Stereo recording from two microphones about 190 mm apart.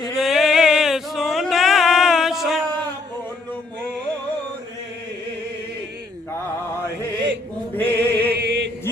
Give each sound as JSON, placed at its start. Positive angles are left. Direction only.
{"t": 0.1, "sound": "a sound", "side_deg": 0}
{"t": 7.8, "sound": "music", "side_deg": 10}
{"t": 8.3, "sound": "choir", "side_deg": -65}